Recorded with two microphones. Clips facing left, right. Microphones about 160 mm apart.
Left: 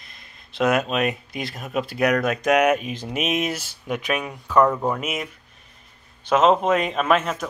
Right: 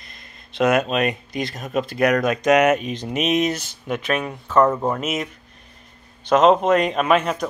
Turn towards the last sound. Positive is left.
turn(degrees=0)  # may be behind; listen again after turning